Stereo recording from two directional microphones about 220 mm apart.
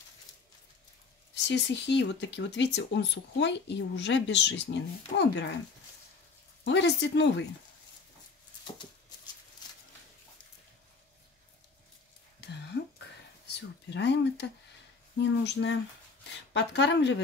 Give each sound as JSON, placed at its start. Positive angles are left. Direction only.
{"t": 1.3, "sound": "speech", "side_deg": 55}
{"t": 6.6, "sound": "speech", "side_deg": 50}
{"t": 13.5, "sound": "speech", "side_deg": 50}